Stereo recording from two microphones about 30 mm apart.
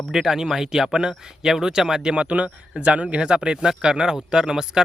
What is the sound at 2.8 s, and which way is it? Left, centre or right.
Speech, right.